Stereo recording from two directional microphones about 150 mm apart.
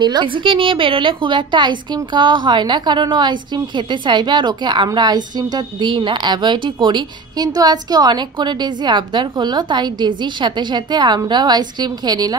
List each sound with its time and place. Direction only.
0.0 s a woman's voice: 30° right (ahead or behind)